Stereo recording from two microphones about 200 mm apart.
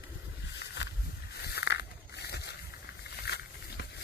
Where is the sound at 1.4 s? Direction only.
55° left (ahead or behind).